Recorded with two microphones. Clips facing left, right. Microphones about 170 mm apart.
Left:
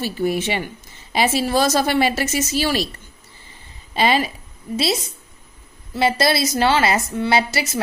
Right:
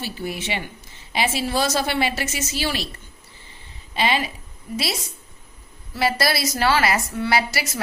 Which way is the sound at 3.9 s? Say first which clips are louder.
Left 4 dB; 40° left (ahead or behind).